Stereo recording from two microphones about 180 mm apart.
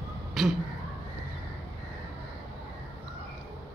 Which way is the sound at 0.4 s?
Centre (ahead or behind).